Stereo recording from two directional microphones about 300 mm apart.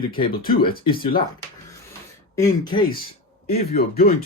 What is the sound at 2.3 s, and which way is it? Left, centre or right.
Speech, centre.